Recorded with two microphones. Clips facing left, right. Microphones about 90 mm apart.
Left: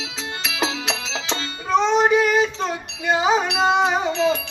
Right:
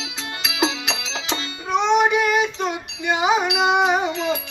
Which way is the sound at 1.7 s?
35° left (ahead or behind).